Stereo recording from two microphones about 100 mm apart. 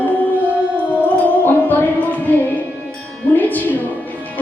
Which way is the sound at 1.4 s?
15° left (ahead or behind).